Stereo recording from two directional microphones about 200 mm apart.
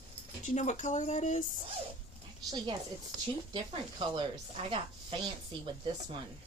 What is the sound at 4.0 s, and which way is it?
Speech, 25° right (ahead or behind).